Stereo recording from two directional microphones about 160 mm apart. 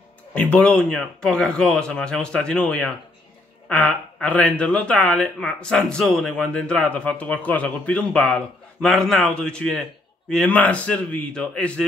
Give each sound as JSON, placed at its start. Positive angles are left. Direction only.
{"t": 0.3, "sound": "speech", "side_deg": 10}